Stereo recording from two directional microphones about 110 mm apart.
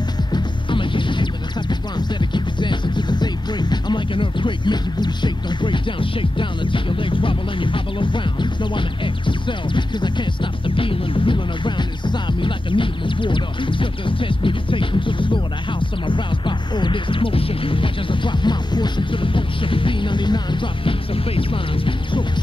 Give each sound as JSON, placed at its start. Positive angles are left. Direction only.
{"t": 0.3, "sound": "music", "side_deg": 50}